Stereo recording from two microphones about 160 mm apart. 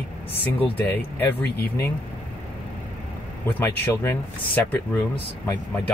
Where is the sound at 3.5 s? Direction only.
10° left (ahead or behind).